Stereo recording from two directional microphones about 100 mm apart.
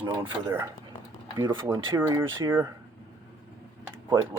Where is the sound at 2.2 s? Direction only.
25° right (ahead or behind).